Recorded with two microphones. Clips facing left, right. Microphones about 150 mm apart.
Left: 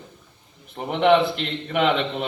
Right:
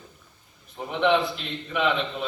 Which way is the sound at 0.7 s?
65° left (ahead or behind).